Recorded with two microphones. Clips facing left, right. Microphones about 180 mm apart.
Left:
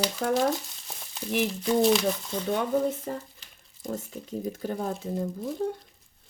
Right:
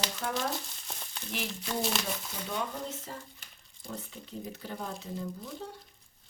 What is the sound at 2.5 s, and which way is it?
Speech, 55° left (ahead or behind).